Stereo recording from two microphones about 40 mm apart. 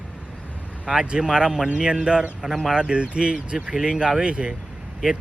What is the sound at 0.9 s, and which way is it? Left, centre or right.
Speech, right.